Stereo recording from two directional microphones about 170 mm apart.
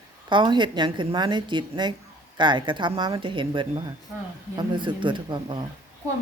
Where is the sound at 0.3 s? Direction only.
25° right (ahead or behind).